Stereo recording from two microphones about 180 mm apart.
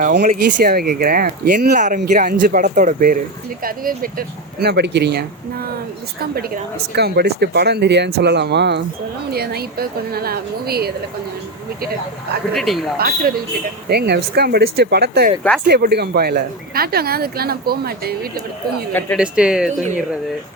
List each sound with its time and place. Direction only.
0.2 s speech: 45° right (ahead or behind); by 5.6 s 65° right (ahead or behind)
6.9 s speech: 65° right (ahead or behind)
12.5 s speech: centre (ahead or behind)
13.0 s speech: 55° right (ahead or behind)
19.1 s speech: 5° right (ahead or behind)